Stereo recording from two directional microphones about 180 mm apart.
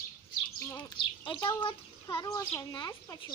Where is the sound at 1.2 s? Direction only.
25° left (ahead or behind).